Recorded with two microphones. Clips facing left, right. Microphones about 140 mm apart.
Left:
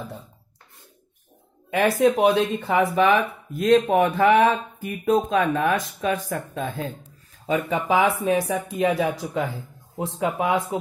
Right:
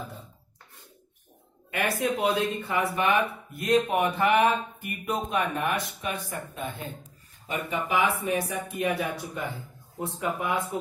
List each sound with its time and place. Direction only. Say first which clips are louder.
1.7 s speech: left 9 dB; 90° left
7.7 s speech: left 4 dB; 90° left